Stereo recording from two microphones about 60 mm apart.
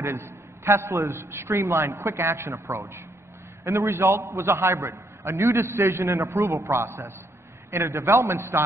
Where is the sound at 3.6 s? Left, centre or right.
Right.